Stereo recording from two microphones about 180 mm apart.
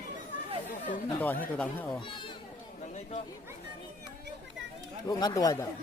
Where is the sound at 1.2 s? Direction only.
10° left (ahead or behind).